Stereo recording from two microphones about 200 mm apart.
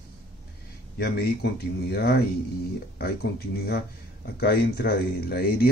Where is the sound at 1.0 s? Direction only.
55° left (ahead or behind).